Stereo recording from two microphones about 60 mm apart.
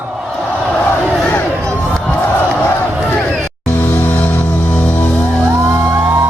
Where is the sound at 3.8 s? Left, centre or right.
Left.